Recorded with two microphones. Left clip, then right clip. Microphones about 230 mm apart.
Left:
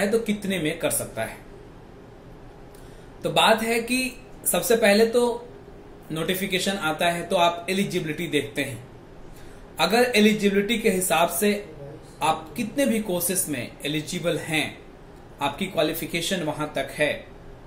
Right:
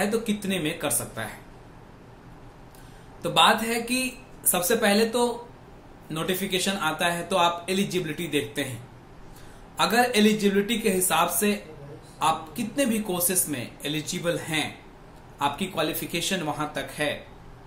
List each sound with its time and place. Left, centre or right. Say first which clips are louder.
0.0 s speech: left 3 dB; centre
3.2 s speech: even; centre
6.0 s speech: left 2 dB; centre
9.8 s speech: left 2 dB; centre